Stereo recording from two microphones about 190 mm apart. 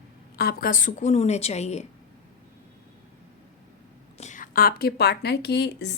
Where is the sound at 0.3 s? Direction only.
50° left (ahead or behind); by 1.9 s 35° left (ahead or behind).